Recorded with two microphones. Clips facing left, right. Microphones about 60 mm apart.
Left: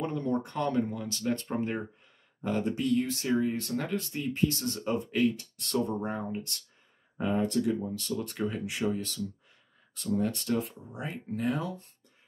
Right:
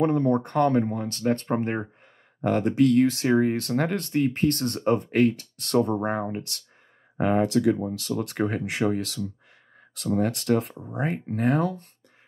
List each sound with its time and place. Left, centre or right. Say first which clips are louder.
0.0 s speech: right 9 dB; right
2.4 s speech: right 9 dB; right
10.9 s speech: right 8 dB; right